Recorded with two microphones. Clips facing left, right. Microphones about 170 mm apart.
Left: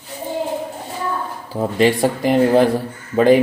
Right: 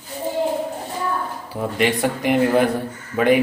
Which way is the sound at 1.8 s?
30° left (ahead or behind).